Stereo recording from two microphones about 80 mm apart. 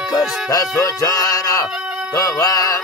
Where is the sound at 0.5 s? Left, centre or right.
Left.